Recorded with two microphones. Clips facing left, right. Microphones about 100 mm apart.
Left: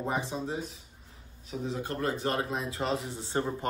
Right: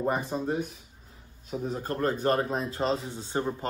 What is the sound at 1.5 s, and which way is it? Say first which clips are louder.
Speech: right 2 dB; 40° right (ahead or behind).